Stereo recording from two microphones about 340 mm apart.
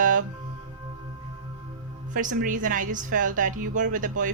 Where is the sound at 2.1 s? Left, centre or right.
Right.